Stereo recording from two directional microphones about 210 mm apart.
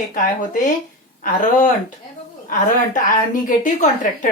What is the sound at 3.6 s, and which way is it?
Speech, 40° left (ahead or behind).